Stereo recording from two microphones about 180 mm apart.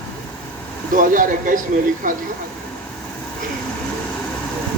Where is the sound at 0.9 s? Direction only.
45° right (ahead or behind).